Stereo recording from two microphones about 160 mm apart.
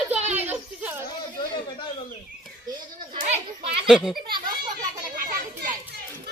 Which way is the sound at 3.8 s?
5° right (ahead or behind).